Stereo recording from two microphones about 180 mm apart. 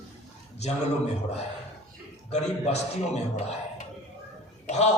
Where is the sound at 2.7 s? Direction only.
35° left (ahead or behind).